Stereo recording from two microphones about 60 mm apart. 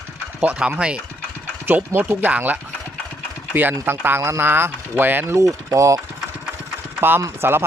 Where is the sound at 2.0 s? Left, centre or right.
Right.